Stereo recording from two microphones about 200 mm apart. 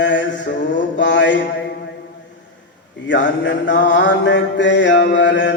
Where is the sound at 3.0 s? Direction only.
60° left (ahead or behind).